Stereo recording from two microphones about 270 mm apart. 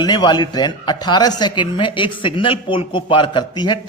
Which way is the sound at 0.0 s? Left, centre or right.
Centre.